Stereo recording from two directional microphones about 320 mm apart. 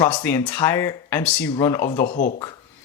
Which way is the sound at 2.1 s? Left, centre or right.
Left.